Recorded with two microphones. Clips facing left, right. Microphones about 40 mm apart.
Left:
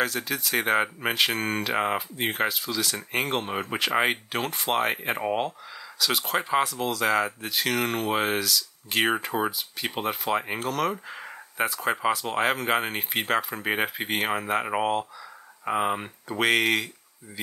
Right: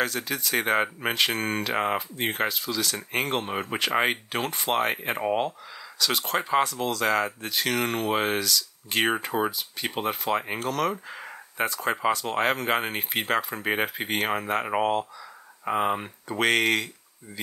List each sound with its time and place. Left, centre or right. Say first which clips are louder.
0.0 s speech: left 1 dB; centre